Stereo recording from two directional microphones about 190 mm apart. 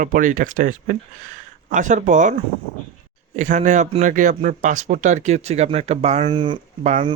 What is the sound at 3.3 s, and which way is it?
A man's voice, 40° right (ahead or behind).